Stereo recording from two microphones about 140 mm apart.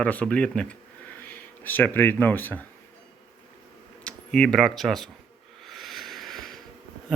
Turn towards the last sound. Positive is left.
turn(degrees=0)  # may be behind; listen again after turning